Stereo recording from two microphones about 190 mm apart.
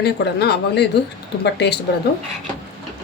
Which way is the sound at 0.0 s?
60° left (ahead or behind).